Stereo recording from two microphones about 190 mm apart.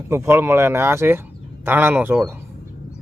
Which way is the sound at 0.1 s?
15° right (ahead or behind).